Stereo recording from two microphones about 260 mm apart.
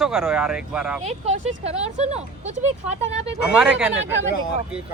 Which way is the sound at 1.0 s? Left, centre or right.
Right.